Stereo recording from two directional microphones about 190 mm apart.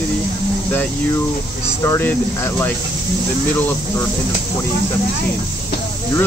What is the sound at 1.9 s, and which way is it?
Speech, 10° left (ahead or behind).